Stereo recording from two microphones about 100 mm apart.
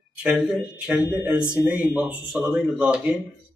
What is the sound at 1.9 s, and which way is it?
Speech, 10° right (ahead or behind).